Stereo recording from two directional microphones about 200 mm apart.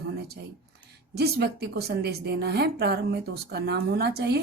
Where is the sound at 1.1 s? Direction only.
55° right (ahead or behind).